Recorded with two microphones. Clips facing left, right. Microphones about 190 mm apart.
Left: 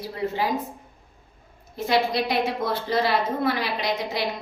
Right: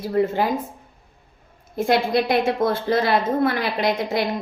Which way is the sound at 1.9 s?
50° right (ahead or behind).